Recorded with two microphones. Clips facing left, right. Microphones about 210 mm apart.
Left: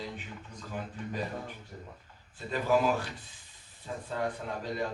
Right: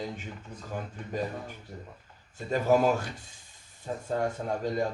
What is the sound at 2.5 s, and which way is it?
Speech, 45° right (ahead or behind).